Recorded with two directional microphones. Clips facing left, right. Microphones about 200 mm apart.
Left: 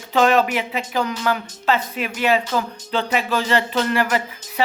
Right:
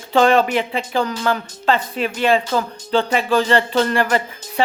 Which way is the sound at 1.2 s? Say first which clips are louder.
Right 2 dB; 10° left (ahead or behind).